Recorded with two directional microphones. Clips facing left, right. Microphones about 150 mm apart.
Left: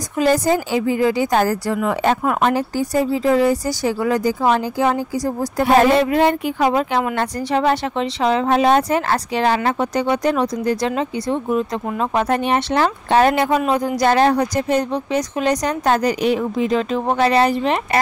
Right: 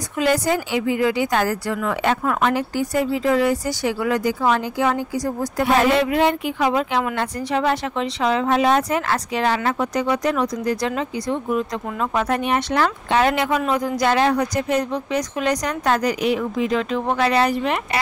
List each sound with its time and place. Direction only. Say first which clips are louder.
0.2 s speech: left 3 dB; 40° left (ahead or behind)
1.8 s speech: left 3 dB; 25° left (ahead or behind)